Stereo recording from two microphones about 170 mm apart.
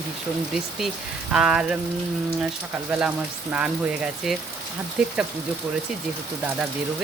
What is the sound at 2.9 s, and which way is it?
Speech, 10° right (ahead or behind).